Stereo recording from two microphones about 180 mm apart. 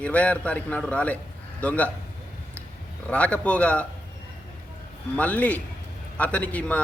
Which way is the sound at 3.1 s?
5° left (ahead or behind).